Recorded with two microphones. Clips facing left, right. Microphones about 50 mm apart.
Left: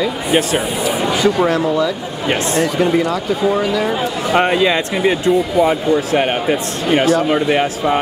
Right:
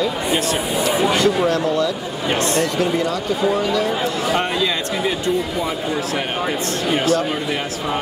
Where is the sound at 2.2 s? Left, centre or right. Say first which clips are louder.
Left 3 dB; left.